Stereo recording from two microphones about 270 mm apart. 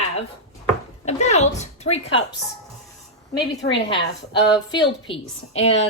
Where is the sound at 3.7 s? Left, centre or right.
Left.